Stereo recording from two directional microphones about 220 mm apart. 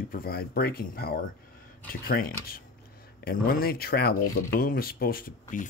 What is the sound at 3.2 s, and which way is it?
Speech, 40° left (ahead or behind).